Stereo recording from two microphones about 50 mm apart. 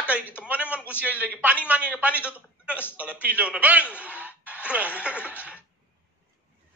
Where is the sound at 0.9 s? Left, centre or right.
Right.